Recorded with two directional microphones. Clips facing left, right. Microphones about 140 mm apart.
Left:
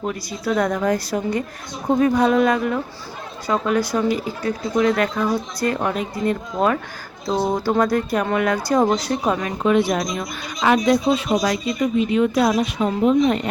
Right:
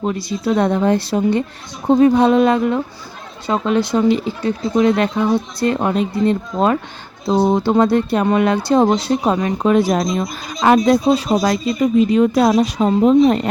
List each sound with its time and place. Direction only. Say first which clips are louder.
0.0 s speech: right 5 dB; 25° right (ahead or behind)
9.7 s speech: right 3 dB; 40° right (ahead or behind)
10.0 s speech: right 5 dB; 30° right (ahead or behind)
10.6 s speech: right 4 dB; 40° right (ahead or behind)